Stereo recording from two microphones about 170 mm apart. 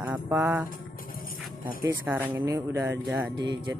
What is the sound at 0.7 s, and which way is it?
Music, 55° left (ahead or behind).